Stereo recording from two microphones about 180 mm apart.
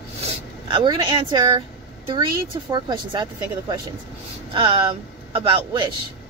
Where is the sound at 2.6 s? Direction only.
25° right (ahead or behind).